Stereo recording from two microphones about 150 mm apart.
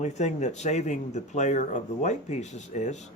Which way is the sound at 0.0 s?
50° left (ahead or behind).